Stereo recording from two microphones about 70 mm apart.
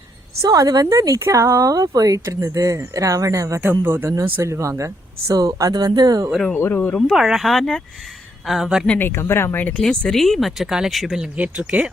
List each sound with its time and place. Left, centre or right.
0.5 s speech: right
3.6 s speech: right
4.4 s speech: right
5.3 s speech: right
5.7 s speech: right
6.5 s speech: left
7.1 s speech: centre
9.0 s speech: left
9.8 s speech: centre
11.3 s speech: centre